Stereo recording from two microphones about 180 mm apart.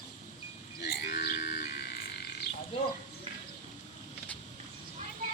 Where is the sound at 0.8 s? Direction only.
60° left (ahead or behind).